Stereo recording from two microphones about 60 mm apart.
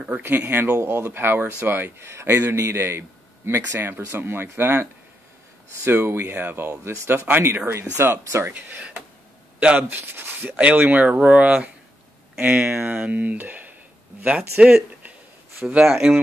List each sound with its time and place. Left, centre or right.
0.2 s a man's voice: right
5.9 s a man's voice: right
6.7 s speech: right
7.2 s a man's voice: right
8.5 s speech: right
9.8 s speech: right
12.4 s a man's voice: right
15.8 s speech: centre